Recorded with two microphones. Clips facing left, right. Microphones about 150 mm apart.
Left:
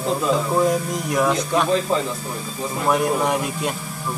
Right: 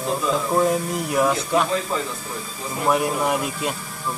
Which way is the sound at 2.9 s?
5° right (ahead or behind).